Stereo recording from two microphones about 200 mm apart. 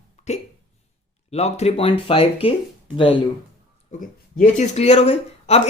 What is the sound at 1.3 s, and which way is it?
Speech, 30° left (ahead or behind).